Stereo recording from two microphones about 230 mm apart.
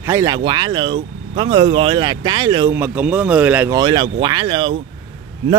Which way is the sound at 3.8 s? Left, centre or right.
Centre.